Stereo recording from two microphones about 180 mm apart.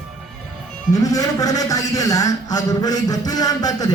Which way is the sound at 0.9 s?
20° left (ahead or behind).